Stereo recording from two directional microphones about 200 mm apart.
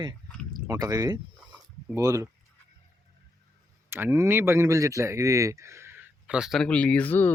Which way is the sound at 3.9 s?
10° right (ahead or behind).